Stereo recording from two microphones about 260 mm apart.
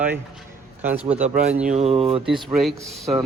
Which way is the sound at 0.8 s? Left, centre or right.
Centre.